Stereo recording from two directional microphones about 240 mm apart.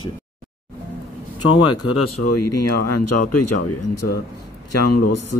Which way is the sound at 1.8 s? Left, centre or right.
Left.